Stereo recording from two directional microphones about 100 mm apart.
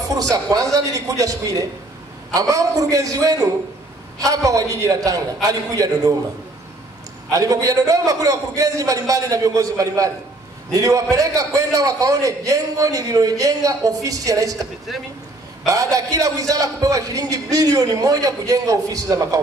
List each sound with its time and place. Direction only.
0.1 s a man's voice: 35° right (ahead or behind)
7.2 s a man's voice: 35° right (ahead or behind)
14.9 s speech: centre (ahead or behind)
15.6 s a man's voice: 35° right (ahead or behind)